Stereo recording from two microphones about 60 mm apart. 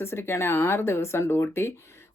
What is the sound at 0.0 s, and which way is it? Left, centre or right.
Speech, left.